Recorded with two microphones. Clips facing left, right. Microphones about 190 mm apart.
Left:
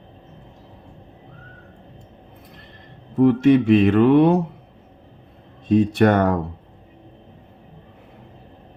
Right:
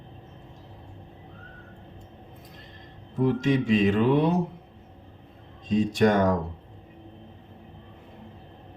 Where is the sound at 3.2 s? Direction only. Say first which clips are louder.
Left 9 dB; 60° left (ahead or behind).